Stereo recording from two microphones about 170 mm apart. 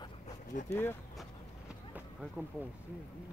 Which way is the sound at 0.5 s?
50° left (ahead or behind).